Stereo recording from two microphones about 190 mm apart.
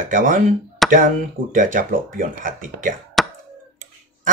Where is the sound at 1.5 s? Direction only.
45° right (ahead or behind).